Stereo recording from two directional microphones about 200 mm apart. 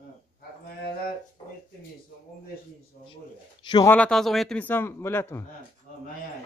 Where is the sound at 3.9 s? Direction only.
5° left (ahead or behind).